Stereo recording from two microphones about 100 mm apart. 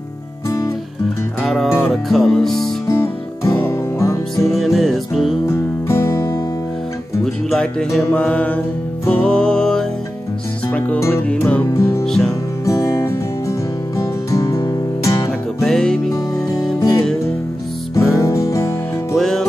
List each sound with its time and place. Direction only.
1.4 s music: centre (ahead or behind)
2.9 s music: 25° left (ahead or behind)
4.6 s music: centre (ahead or behind)
5.5 s music: 30° left (ahead or behind)
7.4 s music: centre (ahead or behind)
8.1 s music: 15° left (ahead or behind)
11.0 s music: 25° left (ahead or behind)
11.2 s music: 15° left (ahead or behind); by 15.2 s 40° left (ahead or behind)
15.6 s music: 5° left (ahead or behind)
17.9 s music: 30° left (ahead or behind)
19.1 s music: 5° left (ahead or behind)